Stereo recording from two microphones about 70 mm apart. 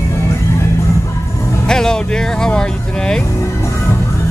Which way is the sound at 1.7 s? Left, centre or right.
Centre.